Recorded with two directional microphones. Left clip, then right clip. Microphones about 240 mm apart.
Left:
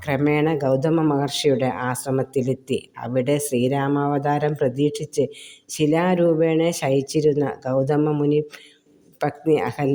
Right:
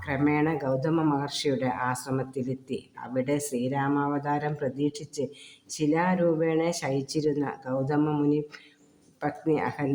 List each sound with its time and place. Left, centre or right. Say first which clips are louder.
0.0 s speech: left 6 dB; left